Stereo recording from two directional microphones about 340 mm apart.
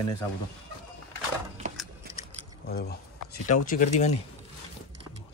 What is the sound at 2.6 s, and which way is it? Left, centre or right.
Speech, left.